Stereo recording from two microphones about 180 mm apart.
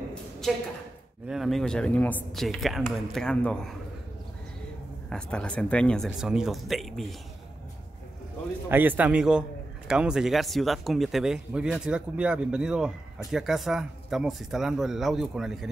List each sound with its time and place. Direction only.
1.2 s speech: centre (ahead or behind)
5.1 s speech: 5° left (ahead or behind)
8.6 s a man's voice: 10° right (ahead or behind)